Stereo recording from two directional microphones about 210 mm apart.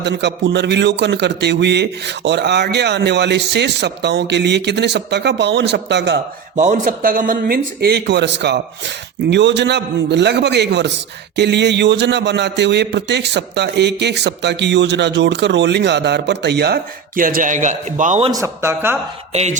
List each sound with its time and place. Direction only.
0.0 s a man's voice: 55° right (ahead or behind)
6.6 s a man's voice: 35° right (ahead or behind)
18.3 s speech: 15° right (ahead or behind)
19.3 s a sound: 30° right (ahead or behind)